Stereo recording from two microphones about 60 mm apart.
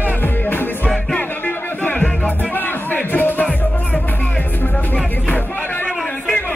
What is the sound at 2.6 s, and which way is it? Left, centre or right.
Music, left.